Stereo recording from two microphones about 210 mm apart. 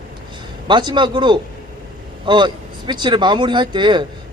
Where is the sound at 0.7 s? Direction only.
20° right (ahead or behind).